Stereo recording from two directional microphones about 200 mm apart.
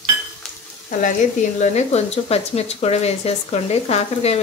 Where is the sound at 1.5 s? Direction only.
35° left (ahead or behind).